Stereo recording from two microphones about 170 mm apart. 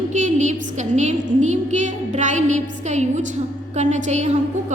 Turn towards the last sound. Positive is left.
turn(degrees=-45)  # may be behind; listen again after turning